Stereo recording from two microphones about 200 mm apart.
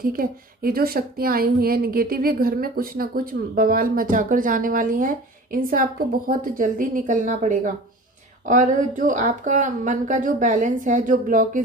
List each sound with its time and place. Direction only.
0.2 s a woman's voice: 50° right (ahead or behind)